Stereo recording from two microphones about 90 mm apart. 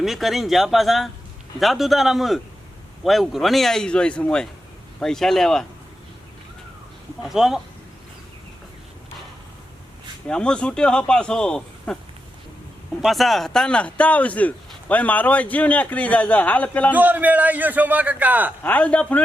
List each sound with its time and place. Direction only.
0.0 s a man's voice: centre (ahead or behind)
7.2 s a man's voice: 5° right (ahead or behind)
10.2 s speech: 10° left (ahead or behind)
13.0 s speech: centre (ahead or behind); by 16.9 s 15° left (ahead or behind)
16.9 s a man's voice: 20° right (ahead or behind)
18.6 s speech: 15° left (ahead or behind)